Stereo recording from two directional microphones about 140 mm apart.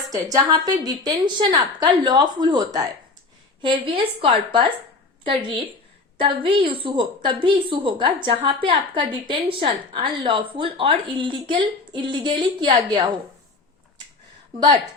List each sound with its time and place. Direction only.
0.1 s a woman's voice: 25° right (ahead or behind)